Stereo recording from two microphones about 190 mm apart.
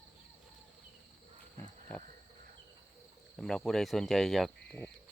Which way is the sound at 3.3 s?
5° left (ahead or behind).